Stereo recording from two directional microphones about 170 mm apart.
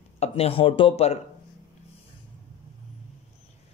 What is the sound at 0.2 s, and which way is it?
Speech, 35° left (ahead or behind).